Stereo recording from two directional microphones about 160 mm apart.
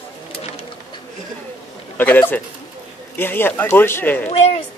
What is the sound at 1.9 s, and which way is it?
Speech, 10° left (ahead or behind).